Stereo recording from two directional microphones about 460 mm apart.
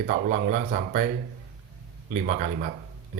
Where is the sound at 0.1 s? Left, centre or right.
Centre.